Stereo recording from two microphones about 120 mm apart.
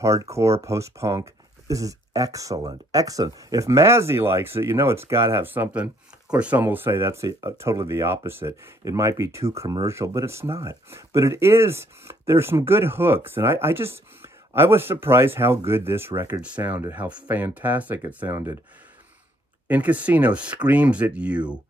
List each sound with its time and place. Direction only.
0.0 s speech: 25° right (ahead or behind)
19.7 s speech: 10° right (ahead or behind)